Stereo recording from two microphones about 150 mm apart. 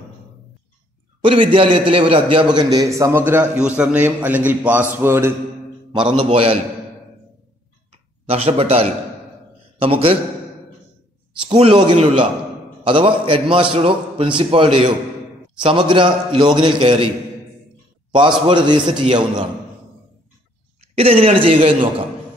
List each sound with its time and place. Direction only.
1.2 s a man's voice: 35° right (ahead or behind); by 5.3 s 15° right (ahead or behind)
5.9 s a man's voice: 30° right (ahead or behind)
7.9 s a sound: 40° right (ahead or behind)
9.8 s a man's voice: 40° right (ahead or behind)
11.4 s a man's voice: 40° right (ahead or behind)
18.5 s a man's voice: 30° right (ahead or behind)
20.9 s a man's voice: 40° right (ahead or behind)